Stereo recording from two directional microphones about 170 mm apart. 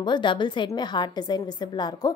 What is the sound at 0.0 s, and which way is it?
A woman's voice, 25° left (ahead or behind).